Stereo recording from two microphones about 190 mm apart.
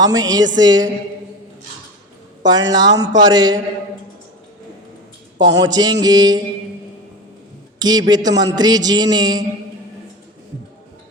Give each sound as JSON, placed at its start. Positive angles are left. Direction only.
{"t": 0.0, "sound": "a man's voice", "side_deg": -20}
{"t": 2.4, "sound": "a man's voice", "side_deg": -20}
{"t": 5.5, "sound": "a man's voice", "side_deg": -20}
{"t": 7.8, "sound": "a man's voice", "side_deg": -20}